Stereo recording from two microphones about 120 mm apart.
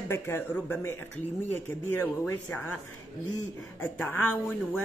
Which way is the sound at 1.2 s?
90° left.